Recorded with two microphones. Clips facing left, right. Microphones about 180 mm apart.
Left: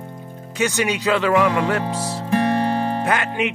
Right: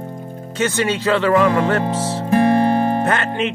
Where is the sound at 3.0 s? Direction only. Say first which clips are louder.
Right 2 dB; 10° left (ahead or behind).